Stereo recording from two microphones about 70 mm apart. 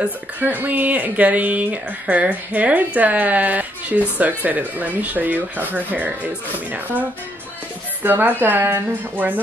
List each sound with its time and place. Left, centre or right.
0.4 s speech: right
8.0 s speech: right